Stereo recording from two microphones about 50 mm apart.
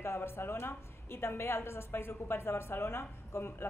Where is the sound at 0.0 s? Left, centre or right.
Left.